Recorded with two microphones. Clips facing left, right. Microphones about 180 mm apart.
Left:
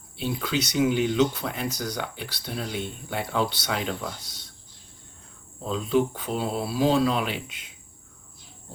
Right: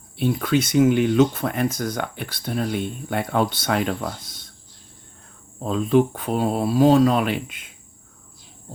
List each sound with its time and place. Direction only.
0.2 s speech: 50° right (ahead or behind)
5.6 s speech: 55° right (ahead or behind)